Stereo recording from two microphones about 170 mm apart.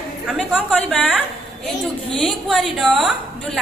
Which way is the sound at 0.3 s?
5° right (ahead or behind).